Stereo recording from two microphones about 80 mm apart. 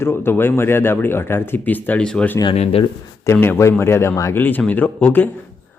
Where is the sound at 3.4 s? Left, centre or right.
Left.